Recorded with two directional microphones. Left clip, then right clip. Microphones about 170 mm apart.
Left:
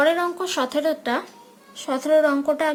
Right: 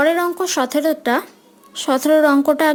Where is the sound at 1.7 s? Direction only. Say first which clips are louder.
Right 4 dB; 60° right (ahead or behind).